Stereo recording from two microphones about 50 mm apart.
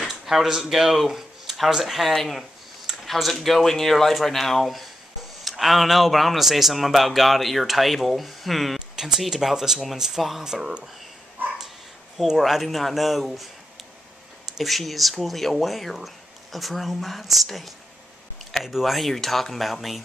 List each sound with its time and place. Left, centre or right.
0.0 s speech: centre
2.9 s a sound: centre
3.3 s speech: centre
12.3 s speech: centre
14.6 s speech: centre